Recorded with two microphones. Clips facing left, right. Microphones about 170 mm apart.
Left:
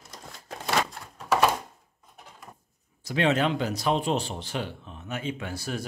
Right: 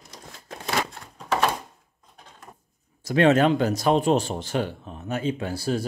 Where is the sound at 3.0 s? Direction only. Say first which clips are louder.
Right 6 dB; 50° right (ahead or behind); by 5.8 s 30° right (ahead or behind).